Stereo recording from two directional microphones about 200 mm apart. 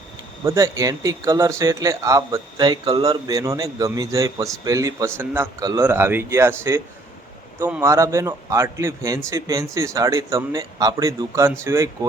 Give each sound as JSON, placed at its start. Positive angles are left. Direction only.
{"t": 0.4, "sound": "speech", "side_deg": -15}